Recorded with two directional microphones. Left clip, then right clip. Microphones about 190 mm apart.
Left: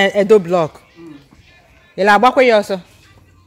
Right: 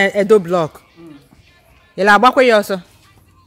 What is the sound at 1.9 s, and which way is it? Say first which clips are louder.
Speech: right 1 dB; 10° right (ahead or behind).